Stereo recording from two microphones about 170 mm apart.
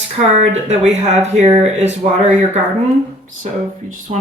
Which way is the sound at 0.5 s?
40° right (ahead or behind).